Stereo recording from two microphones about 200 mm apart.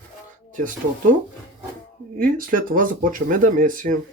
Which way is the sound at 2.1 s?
45° right (ahead or behind).